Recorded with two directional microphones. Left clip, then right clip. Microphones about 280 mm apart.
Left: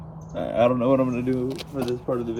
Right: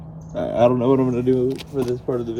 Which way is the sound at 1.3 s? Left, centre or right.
Centre.